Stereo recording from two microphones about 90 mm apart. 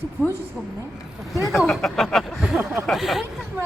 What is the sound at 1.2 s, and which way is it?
Speech, centre (ahead or behind).